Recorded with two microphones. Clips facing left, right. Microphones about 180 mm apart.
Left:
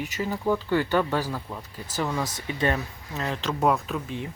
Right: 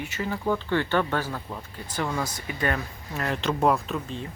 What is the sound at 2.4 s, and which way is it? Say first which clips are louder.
Speech: left 2 dB; 25° left (ahead or behind).